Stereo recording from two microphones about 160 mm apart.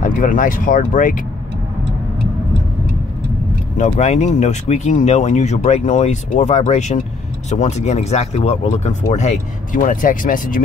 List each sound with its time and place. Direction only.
0.0 s speech: 55° left (ahead or behind)
3.7 s speech: 45° left (ahead or behind)